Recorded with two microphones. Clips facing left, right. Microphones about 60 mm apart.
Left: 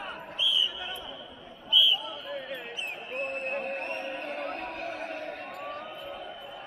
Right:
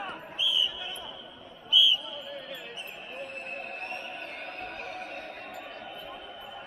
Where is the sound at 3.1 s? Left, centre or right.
Left.